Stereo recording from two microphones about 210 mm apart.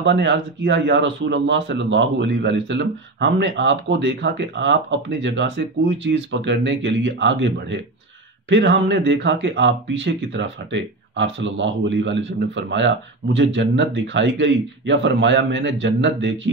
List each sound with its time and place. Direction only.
0.0 s speech: 55° right (ahead or behind)